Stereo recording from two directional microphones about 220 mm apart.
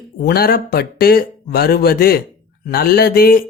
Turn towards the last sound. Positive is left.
turn(degrees=45)  # may be behind; listen again after turning